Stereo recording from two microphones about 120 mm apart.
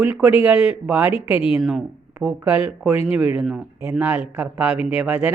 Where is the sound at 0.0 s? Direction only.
10° right (ahead or behind).